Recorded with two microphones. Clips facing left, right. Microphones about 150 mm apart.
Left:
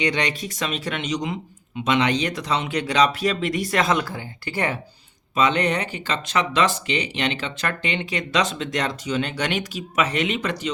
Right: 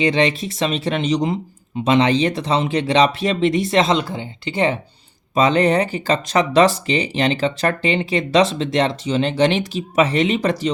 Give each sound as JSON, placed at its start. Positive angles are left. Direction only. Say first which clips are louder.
{"t": 0.0, "sound": "speech", "louder": "right 7 dB", "side_deg": -30}
{"t": 5.3, "sound": "speech", "louder": "right 5 dB", "side_deg": -35}